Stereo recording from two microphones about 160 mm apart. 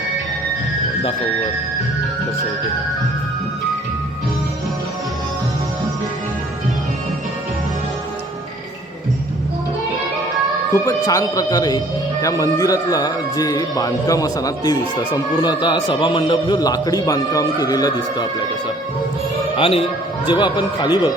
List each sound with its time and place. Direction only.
10.7 s a man's voice: 20° left (ahead or behind)
19.5 s a man's voice: 35° left (ahead or behind)